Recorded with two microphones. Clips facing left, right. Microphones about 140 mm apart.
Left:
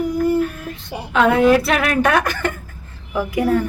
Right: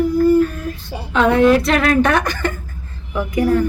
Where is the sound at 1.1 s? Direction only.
5° left (ahead or behind).